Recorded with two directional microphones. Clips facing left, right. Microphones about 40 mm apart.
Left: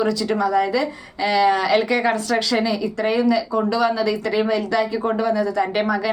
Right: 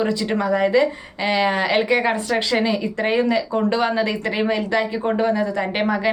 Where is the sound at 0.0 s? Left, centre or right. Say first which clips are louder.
Left 1 dB; right.